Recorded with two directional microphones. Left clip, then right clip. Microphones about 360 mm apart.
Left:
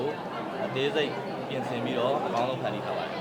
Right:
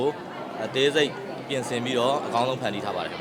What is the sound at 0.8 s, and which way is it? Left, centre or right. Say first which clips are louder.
A man's voice: right 7 dB; right.